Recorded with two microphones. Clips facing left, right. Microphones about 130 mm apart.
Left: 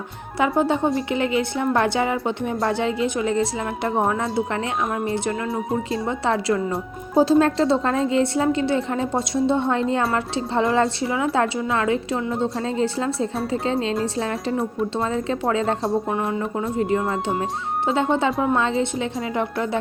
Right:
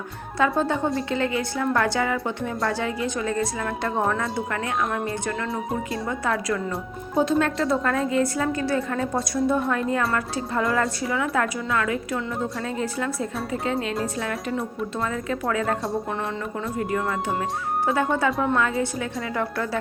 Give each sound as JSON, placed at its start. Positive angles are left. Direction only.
{"t": 0.3, "sound": "a woman's voice", "side_deg": 20}